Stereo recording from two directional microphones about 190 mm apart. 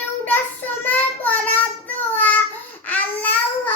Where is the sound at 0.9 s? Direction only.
10° left (ahead or behind).